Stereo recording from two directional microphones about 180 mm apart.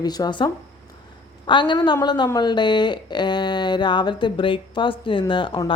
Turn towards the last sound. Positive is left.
turn(degrees=25)  # may be behind; listen again after turning